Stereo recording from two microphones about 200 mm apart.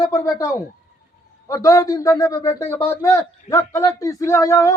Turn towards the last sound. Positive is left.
turn(degrees=15)  # may be behind; listen again after turning